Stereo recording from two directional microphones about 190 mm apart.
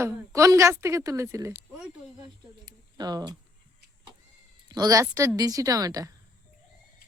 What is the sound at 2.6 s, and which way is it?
Speech, 20° right (ahead or behind).